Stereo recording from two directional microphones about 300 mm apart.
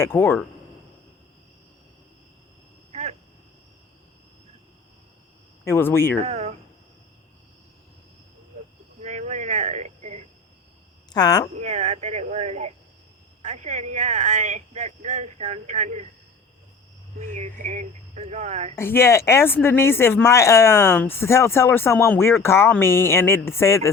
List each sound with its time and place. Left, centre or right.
0.0 s speech: centre
2.9 s a sound: right
5.6 s speech: centre
6.2 s a sound: right
9.0 s a sound: right
11.1 s speech: centre
11.6 s speech: right
17.3 s speech: right
18.8 s speech: centre